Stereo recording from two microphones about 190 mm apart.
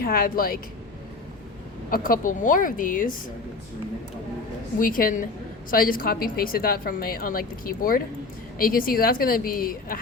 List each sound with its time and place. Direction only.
0.0 s speech: 50° left (ahead or behind)
1.9 s speech: 45° left (ahead or behind)
4.8 s speech: 45° left (ahead or behind)